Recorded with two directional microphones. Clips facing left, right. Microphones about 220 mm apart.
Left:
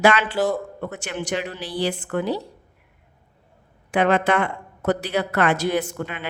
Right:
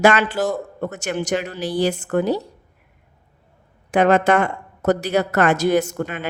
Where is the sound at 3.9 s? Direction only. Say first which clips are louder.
Right 4 dB; 45° right (ahead or behind).